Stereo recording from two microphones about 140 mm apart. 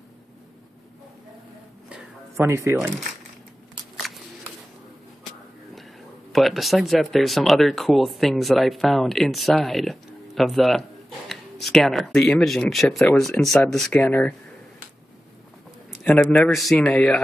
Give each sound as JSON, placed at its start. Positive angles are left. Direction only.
{"t": 2.3, "sound": "speech", "side_deg": -20}
{"t": 6.3, "sound": "speech", "side_deg": 0}
{"t": 14.0, "sound": "a man's voice", "side_deg": 15}
{"t": 15.9, "sound": "a man's voice", "side_deg": 5}